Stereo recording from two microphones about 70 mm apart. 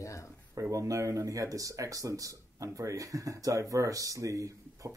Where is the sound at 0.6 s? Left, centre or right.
Right.